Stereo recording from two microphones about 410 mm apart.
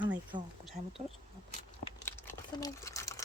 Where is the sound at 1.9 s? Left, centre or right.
Centre.